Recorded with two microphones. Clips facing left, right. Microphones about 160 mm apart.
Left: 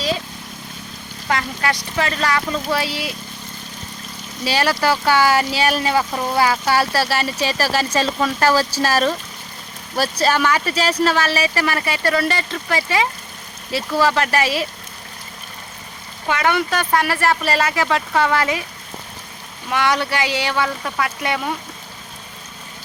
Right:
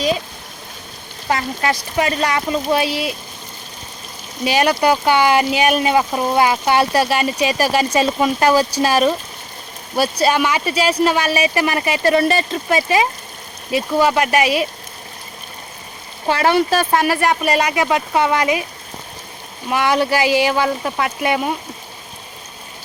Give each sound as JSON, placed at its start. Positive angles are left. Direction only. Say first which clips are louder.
{"t": 1.3, "sound": "speech", "louder": "right 2 dB", "side_deg": -25}
{"t": 4.4, "sound": "speech", "louder": "right 3 dB", "side_deg": -20}
{"t": 16.2, "sound": "speech", "louder": "right 4 dB", "side_deg": -30}
{"t": 19.6, "sound": "speech", "louder": "right 3 dB", "side_deg": -20}